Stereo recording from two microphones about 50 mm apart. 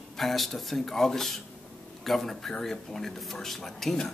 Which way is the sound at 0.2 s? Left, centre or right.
Centre.